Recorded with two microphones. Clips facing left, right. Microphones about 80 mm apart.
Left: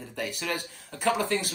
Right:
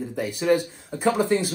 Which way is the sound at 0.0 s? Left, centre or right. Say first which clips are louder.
Right 8 dB; centre.